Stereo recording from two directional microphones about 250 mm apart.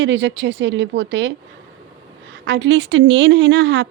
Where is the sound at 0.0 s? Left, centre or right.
Right.